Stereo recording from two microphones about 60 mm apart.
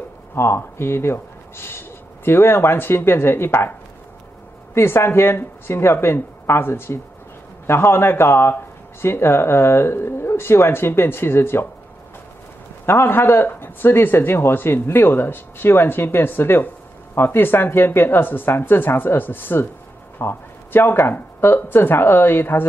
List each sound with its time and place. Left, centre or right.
0.3 s a man's voice: left
4.7 s speech: left
12.8 s a man's voice: left